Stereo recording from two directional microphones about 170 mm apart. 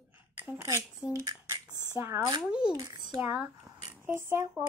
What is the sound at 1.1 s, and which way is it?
Speech, 20° right (ahead or behind).